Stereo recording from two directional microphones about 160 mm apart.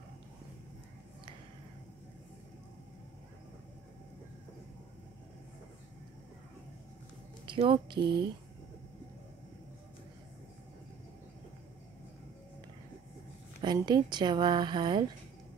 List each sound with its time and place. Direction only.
7.4 s speech: 30° right (ahead or behind)
13.7 s a woman's voice: 25° right (ahead or behind)